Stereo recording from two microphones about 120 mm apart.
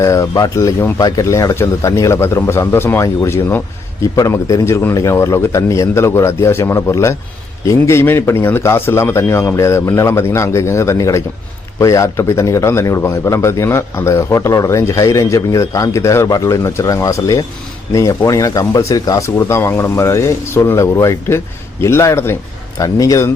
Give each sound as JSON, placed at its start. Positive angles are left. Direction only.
{"t": 0.0, "sound": "a man's voice", "side_deg": 25}